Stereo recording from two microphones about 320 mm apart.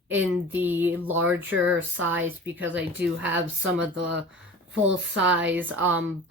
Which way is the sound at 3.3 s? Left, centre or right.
Right.